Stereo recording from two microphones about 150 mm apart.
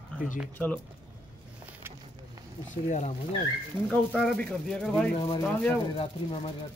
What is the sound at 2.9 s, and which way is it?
Speech, 55° left (ahead or behind).